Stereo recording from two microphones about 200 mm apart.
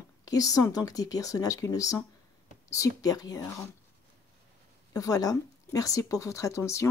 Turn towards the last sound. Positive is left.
turn(degrees=15)  # may be behind; listen again after turning